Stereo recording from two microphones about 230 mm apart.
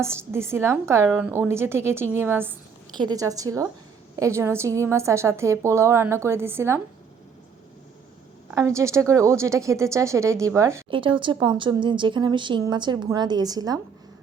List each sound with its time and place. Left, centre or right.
0.0 s speech: centre
8.4 s speech: centre